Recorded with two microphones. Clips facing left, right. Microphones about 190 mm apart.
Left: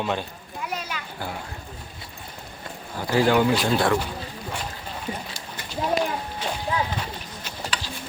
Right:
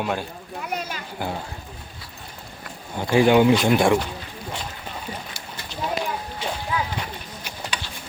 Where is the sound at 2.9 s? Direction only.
20° right (ahead or behind).